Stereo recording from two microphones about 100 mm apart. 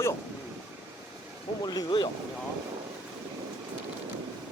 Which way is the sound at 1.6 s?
45° left (ahead or behind).